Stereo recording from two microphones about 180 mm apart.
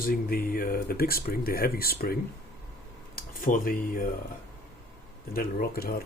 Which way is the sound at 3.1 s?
50° left (ahead or behind).